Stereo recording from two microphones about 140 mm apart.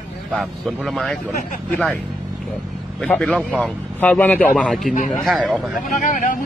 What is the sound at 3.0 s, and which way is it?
A man's voice, 10° left (ahead or behind).